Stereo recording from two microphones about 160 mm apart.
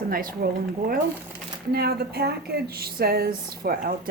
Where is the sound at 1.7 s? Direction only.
75° right (ahead or behind).